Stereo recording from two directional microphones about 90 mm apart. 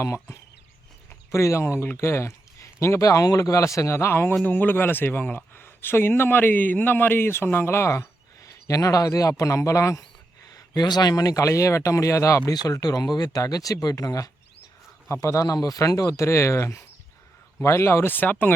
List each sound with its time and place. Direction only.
0.0 s a man's voice: 30° left (ahead or behind)
10.5 s a man's voice: 50° left (ahead or behind); by 18.5 s 20° left (ahead or behind)